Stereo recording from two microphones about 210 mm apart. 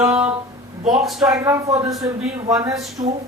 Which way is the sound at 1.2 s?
15° right (ahead or behind).